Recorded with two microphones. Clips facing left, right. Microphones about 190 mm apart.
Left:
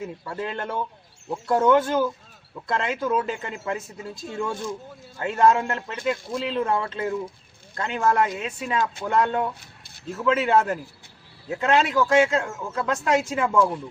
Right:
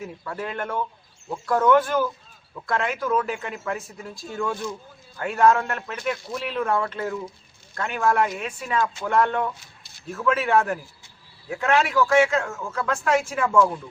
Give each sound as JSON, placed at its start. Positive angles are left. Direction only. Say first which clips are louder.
{"t": 0.0, "sound": "speech", "louder": "left 1 dB", "side_deg": 25}